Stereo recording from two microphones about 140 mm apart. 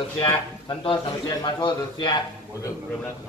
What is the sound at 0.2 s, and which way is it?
A man's voice, 35° left (ahead or behind).